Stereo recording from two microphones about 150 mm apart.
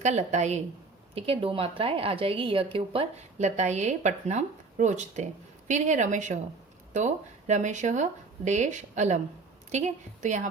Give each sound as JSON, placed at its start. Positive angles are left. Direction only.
{"t": 0.0, "sound": "speech", "side_deg": -50}
{"t": 1.1, "sound": "a woman's voice", "side_deg": -40}